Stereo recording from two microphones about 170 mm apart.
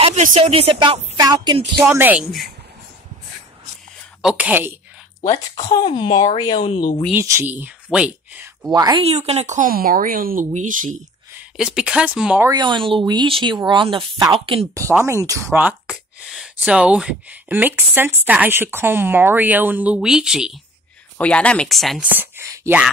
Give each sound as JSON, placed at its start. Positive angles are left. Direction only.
{"t": 0.0, "sound": "speech", "side_deg": -45}
{"t": 1.9, "sound": "speech", "side_deg": -10}
{"t": 4.2, "sound": "speech", "side_deg": -5}
{"t": 5.7, "sound": "speech", "side_deg": 30}
{"t": 7.1, "sound": "speech", "side_deg": -15}
{"t": 8.7, "sound": "speech", "side_deg": -20}
{"t": 9.0, "sound": "speech", "side_deg": -40}
{"t": 11.3, "sound": "speech", "side_deg": -5}
{"t": 12.4, "sound": "speech", "side_deg": -25}
{"t": 14.8, "sound": "speech", "side_deg": -15}
{"t": 21.2, "sound": "speech", "side_deg": 5}
{"t": 22.4, "sound": "a sound", "side_deg": -15}